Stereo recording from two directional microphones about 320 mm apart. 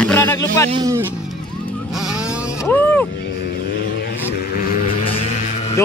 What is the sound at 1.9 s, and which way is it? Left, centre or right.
Vehicle, centre.